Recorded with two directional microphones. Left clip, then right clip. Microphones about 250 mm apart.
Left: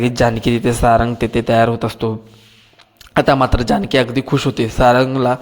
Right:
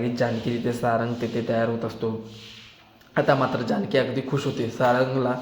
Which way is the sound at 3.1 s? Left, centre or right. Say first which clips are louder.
Left 8 dB; left.